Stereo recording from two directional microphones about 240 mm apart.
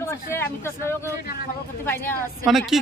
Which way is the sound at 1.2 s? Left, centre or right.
Left.